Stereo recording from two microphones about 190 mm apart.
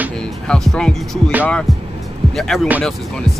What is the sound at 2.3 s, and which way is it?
Speech, centre (ahead or behind).